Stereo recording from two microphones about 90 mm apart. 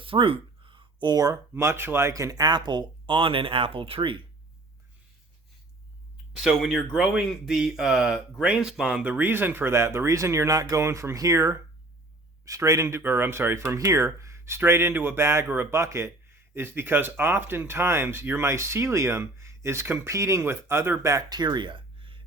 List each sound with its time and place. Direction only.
0.0 s a sound: 80° right
1.0 s speech: 45° right (ahead or behind)
1.5 s speech: 30° right (ahead or behind); by 4.2 s 80° right
6.6 s a man's voice: centre (ahead or behind); by 13.7 s 25° right (ahead or behind)
13.7 s a man's voice: 35° right (ahead or behind); by 22.2 s 70° right (ahead or behind)